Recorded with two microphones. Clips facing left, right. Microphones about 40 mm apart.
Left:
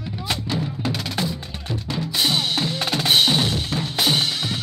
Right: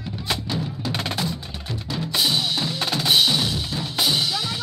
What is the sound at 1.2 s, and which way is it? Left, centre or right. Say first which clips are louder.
Percussion: left 1 dB; left.